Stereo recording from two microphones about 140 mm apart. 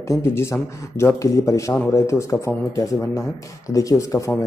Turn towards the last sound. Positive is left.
turn(degrees=20)  # may be behind; listen again after turning